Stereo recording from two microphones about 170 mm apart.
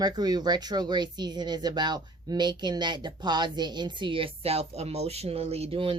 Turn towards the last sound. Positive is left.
turn(degrees=-35)  # may be behind; listen again after turning